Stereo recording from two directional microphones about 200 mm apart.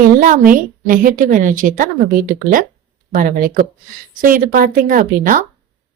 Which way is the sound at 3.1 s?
40° right (ahead or behind).